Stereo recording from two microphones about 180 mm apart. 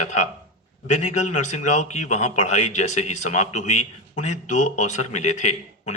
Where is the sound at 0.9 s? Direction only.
40° left (ahead or behind).